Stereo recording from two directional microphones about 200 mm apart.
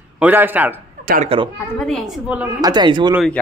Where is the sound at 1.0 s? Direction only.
45° right (ahead or behind).